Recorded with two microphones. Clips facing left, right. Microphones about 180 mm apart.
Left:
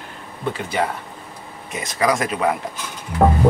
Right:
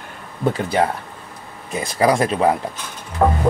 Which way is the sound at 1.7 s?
30° right (ahead or behind).